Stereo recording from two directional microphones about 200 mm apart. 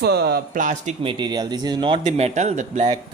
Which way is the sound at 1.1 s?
20° right (ahead or behind).